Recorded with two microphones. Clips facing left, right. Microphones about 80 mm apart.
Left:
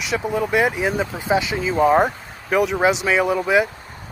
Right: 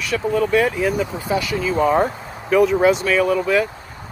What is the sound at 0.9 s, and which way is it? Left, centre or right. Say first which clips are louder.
Speech: left 1 dB; left.